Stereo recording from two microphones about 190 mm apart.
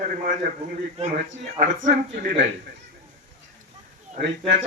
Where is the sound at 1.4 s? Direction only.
40° right (ahead or behind).